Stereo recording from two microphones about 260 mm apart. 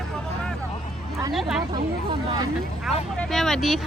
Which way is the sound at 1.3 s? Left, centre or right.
Centre.